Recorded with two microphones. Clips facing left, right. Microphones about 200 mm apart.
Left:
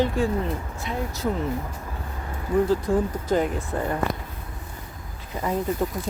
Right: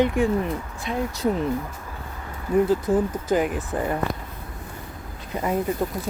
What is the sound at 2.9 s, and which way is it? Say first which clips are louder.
Speech: right 1 dB; 5° right (ahead or behind).